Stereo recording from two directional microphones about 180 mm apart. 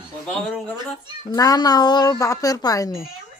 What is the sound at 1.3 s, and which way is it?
Speech, 20° left (ahead or behind).